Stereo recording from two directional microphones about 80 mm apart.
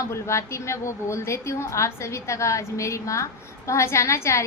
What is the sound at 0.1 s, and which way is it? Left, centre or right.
A woman's voice, left.